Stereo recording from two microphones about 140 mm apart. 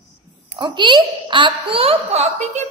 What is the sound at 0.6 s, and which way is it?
A child's voice, 35° right (ahead or behind).